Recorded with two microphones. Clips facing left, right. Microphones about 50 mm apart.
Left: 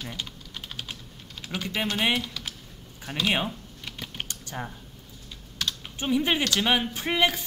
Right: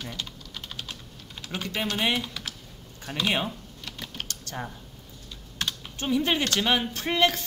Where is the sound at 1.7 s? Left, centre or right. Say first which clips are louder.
Left 1 dB; centre.